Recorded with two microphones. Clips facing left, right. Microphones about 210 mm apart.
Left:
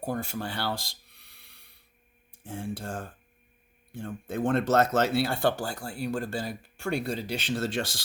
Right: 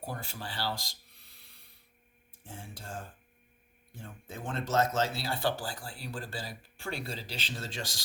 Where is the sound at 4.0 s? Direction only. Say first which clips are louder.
Left 13 dB; 65° left (ahead or behind).